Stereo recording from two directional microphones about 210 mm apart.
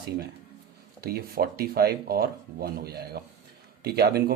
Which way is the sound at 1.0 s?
45° right (ahead or behind).